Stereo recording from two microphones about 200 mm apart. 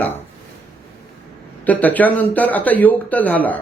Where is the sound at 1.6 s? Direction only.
10° left (ahead or behind).